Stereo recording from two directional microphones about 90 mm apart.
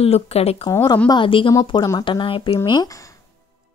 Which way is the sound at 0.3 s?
90° left.